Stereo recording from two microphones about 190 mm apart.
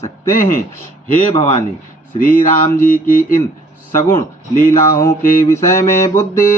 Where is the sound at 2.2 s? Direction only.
45° left (ahead or behind).